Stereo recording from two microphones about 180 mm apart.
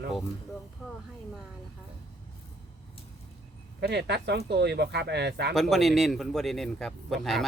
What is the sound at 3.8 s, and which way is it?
Speech, 65° right (ahead or behind).